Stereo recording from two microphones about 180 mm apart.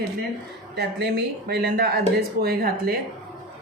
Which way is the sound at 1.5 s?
65° right (ahead or behind).